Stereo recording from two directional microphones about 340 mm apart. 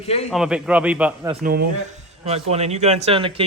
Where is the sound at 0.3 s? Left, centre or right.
Centre.